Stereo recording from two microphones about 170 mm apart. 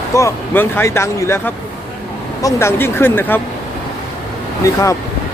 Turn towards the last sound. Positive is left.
turn(degrees=20)  # may be behind; listen again after turning